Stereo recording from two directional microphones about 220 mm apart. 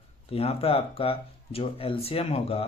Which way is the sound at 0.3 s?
25° left (ahead or behind).